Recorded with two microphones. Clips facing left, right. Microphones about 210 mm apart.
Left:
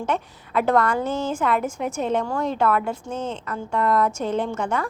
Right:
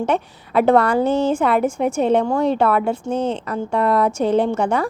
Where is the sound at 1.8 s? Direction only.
65° right (ahead or behind).